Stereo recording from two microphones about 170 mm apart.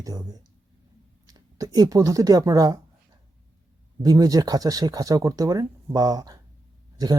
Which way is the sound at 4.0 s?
20° right (ahead or behind).